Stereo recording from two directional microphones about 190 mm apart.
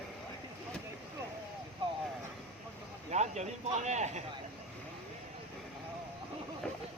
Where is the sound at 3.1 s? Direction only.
35° right (ahead or behind).